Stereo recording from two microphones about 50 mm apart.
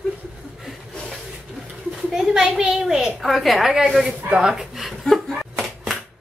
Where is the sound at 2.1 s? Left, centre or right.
Centre.